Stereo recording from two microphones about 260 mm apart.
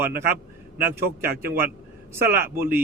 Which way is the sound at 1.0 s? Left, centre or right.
Right.